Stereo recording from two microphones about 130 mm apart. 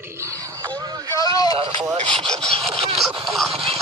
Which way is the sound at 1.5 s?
45° right (ahead or behind).